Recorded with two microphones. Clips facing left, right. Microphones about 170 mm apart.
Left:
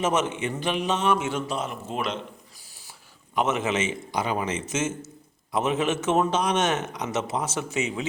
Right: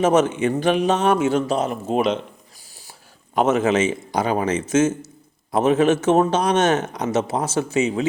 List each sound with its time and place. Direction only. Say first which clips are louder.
0.0 s a man's voice: right 8 dB; 35° right (ahead or behind)
3.3 s a man's voice: right 7 dB; 35° right (ahead or behind)